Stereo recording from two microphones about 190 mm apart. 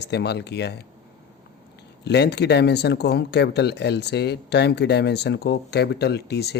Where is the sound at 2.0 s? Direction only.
60° left (ahead or behind).